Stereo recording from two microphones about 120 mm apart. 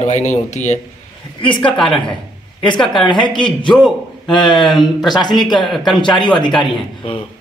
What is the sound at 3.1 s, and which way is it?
Speech, 40° left (ahead or behind).